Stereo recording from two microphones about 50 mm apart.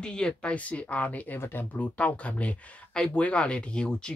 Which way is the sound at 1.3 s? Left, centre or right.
Left.